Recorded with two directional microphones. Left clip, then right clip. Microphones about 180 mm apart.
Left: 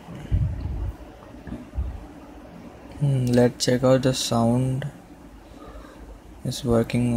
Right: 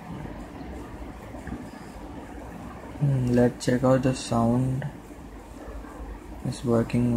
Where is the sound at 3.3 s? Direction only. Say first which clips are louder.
Left 3 dB; 25° left (ahead or behind).